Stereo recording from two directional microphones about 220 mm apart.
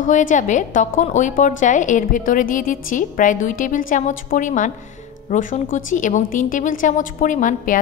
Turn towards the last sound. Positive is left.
turn(degrees=35)  # may be behind; listen again after turning